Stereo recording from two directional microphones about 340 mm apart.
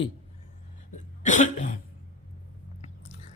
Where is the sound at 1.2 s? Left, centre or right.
Left.